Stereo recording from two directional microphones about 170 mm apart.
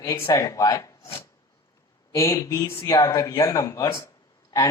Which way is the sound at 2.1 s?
20° left (ahead or behind).